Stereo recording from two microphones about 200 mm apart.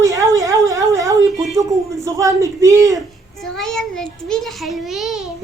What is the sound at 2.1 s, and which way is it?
Speech, 15° right (ahead or behind).